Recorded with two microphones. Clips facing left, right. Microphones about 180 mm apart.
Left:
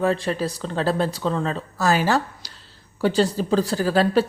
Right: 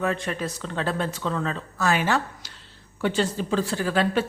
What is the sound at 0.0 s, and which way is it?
A woman's voice, 30° left (ahead or behind).